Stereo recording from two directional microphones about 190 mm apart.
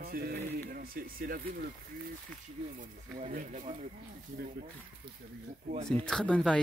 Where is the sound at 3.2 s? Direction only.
45° right (ahead or behind).